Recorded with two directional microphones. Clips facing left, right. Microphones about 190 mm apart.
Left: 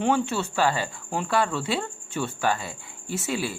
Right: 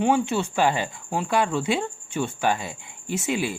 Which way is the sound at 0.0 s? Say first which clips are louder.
Right 2 dB; 15° right (ahead or behind).